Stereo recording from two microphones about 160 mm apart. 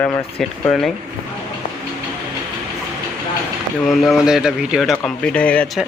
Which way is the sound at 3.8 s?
Centre (ahead or behind).